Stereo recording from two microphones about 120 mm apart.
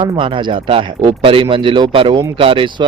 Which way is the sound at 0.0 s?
45° right (ahead or behind).